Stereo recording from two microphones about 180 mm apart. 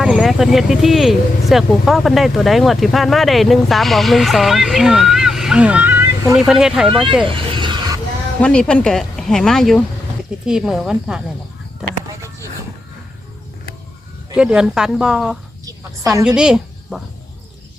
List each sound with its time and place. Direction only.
0.0 s speech: 5° right (ahead or behind)
7.3 s vehicle: 30° right (ahead or behind)
8.4 s speech: 5° left (ahead or behind)
12.0 s a sound: 15° right (ahead or behind)
14.3 s a woman's voice: 5° right (ahead or behind)